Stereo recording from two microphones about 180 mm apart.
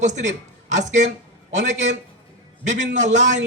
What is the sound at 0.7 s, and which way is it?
A man's voice, 40° right (ahead or behind).